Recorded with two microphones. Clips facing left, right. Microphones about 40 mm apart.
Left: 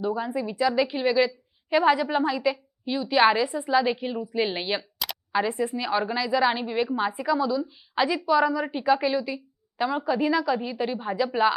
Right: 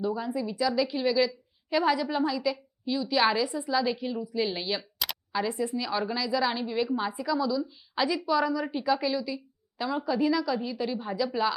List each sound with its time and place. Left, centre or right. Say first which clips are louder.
0.0 s a woman's voice: left 3 dB; left
4.8 s a sound: left 1 dB; centre
5.3 s a woman's voice: left 4 dB; left